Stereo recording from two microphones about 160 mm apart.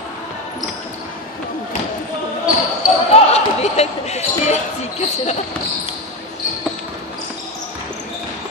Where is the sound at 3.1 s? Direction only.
40° left (ahead or behind).